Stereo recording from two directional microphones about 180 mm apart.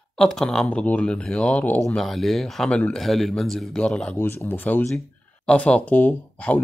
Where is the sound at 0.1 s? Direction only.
Centre (ahead or behind).